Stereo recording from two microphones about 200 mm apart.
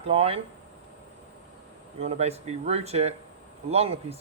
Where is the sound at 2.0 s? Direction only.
30° right (ahead or behind).